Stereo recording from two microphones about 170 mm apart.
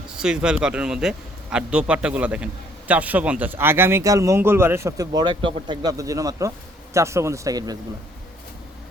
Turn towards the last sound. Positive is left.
turn(degrees=-20)  # may be behind; listen again after turning